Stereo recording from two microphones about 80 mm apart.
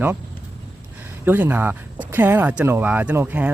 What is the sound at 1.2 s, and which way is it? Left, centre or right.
Speech, right.